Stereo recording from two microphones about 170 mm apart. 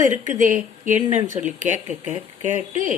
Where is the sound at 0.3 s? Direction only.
50° right (ahead or behind).